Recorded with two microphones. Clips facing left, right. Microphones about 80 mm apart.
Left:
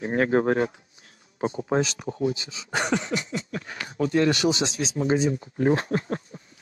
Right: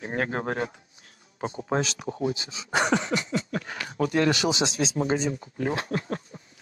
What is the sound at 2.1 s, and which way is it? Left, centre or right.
Speech, right.